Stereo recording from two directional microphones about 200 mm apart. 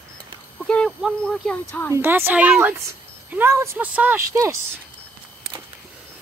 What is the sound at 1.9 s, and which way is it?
Speech, 10° right (ahead or behind).